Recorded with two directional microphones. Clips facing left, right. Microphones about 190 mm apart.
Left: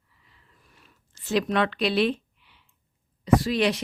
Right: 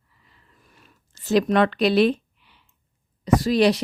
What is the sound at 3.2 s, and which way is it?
Speech, 40° right (ahead or behind).